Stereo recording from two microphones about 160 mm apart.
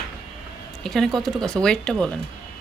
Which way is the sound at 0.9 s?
Centre (ahead or behind).